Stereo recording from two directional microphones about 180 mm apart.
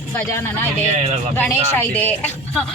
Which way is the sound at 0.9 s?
40° right (ahead or behind).